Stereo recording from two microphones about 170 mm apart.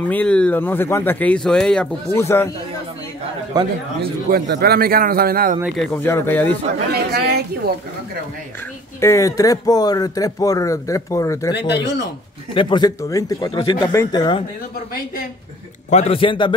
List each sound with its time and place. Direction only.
0.1 s speech: 5° left (ahead or behind)
3.6 s speech: 25° right (ahead or behind)
4.0 s a man's voice: 70° right (ahead or behind)
5.8 s speech: 10° left (ahead or behind)
6.9 s a woman's voice: 70° right (ahead or behind)
9.0 s speech: 20° left (ahead or behind)
11.5 s speech: 80° left
12.5 s speech: 25° left (ahead or behind)
13.5 s a man's voice: 30° left (ahead or behind)
15.9 s a man's voice: 35° left (ahead or behind)